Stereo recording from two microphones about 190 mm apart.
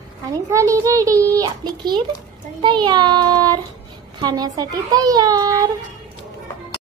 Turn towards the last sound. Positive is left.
turn(degrees=-20)  # may be behind; listen again after turning